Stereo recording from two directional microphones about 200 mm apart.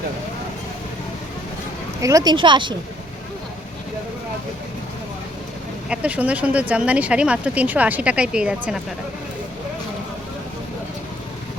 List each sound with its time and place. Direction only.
2.0 s speech: 15° right (ahead or behind)
5.9 s speech: 5° right (ahead or behind)